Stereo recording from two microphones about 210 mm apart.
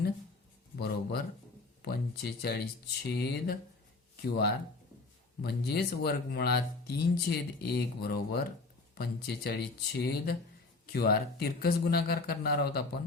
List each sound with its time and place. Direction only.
1.8 s speech: 50° left (ahead or behind)